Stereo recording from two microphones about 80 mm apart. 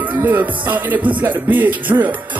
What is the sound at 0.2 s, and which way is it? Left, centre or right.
Music, right.